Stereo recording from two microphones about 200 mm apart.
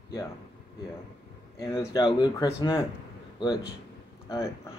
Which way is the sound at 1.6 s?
15° left (ahead or behind).